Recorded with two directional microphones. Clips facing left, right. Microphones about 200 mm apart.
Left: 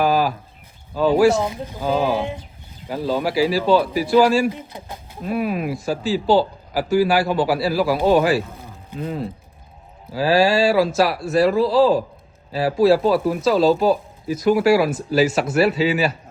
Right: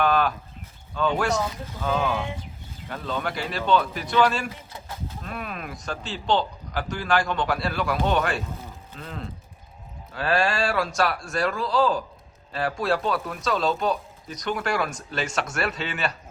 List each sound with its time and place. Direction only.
0.0 s livestock: 5° left (ahead or behind)
0.9 s speech: 35° left (ahead or behind)
1.4 s speech: 20° left (ahead or behind)
1.8 s speech: 30° left (ahead or behind)
3.2 s speech: 5° left (ahead or behind)